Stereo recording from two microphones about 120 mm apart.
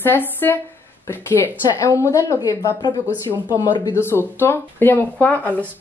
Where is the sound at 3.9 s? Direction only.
20° left (ahead or behind).